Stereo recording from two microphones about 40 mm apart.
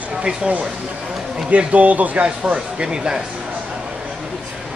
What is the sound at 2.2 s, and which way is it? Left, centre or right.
Speech, right.